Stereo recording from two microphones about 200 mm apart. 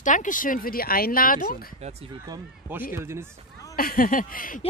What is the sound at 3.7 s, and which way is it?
Speech, 45° left (ahead or behind).